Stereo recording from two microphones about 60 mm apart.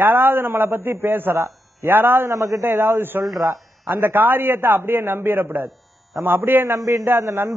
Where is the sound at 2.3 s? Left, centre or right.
Right.